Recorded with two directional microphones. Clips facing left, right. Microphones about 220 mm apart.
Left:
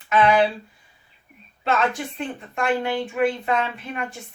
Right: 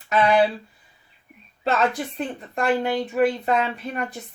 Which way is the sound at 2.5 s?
35° right (ahead or behind).